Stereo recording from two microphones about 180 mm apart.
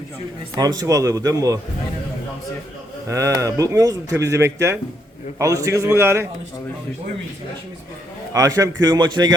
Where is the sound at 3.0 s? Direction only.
15° right (ahead or behind).